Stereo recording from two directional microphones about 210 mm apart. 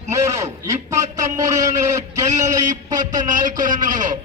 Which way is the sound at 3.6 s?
40° right (ahead or behind).